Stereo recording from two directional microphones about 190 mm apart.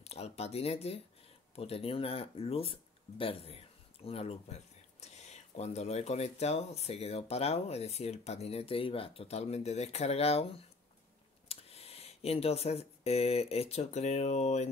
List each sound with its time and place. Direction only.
0.0 s speech: 35° left (ahead or behind)